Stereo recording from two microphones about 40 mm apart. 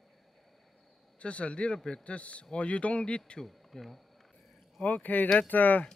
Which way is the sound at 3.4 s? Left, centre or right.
Centre.